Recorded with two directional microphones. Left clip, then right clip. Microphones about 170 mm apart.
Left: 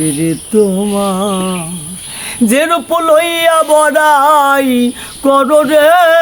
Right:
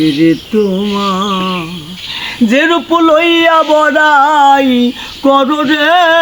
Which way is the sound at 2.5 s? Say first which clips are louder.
Right 1 dB; 30° left (ahead or behind).